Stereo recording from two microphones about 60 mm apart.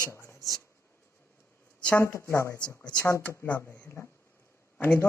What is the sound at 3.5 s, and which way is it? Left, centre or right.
Speech, left.